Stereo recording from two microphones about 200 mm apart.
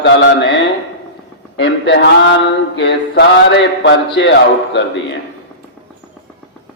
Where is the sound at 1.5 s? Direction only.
60° left (ahead or behind).